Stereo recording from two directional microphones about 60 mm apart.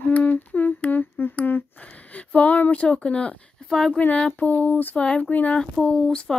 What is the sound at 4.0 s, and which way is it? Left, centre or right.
Speech, left.